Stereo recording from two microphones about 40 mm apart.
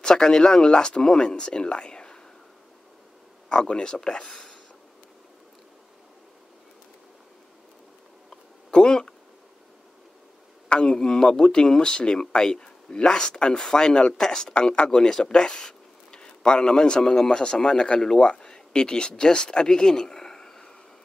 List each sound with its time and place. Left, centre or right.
0.0 s speech: centre
3.4 s speech: left
8.6 s speech: left
10.7 s a man's voice: left